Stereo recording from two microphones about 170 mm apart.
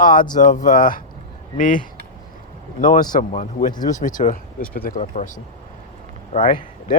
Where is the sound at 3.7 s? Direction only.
25° left (ahead or behind).